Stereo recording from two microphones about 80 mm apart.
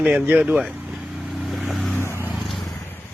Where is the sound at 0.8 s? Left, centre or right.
Centre.